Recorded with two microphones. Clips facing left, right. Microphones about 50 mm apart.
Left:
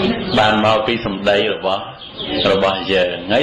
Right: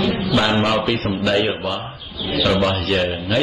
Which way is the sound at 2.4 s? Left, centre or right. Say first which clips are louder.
Left 3 dB; centre.